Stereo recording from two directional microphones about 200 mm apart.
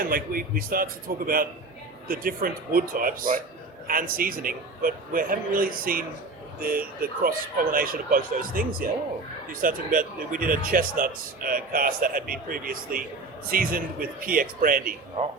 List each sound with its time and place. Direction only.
0.0 s speech: 45° right (ahead or behind)